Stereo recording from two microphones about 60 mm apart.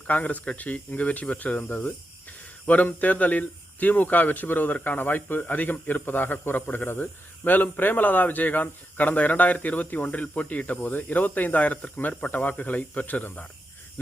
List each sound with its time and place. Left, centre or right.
0.1 s speech: left